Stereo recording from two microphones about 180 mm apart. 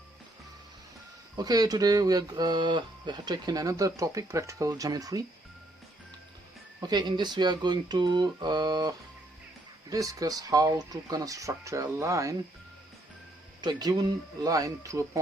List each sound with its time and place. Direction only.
1.4 s speech: 20° right (ahead or behind)
6.8 s speech: 25° right (ahead or behind)
13.6 s speech: 20° right (ahead or behind)